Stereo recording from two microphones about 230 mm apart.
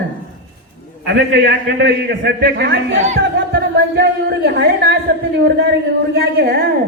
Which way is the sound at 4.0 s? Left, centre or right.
Right.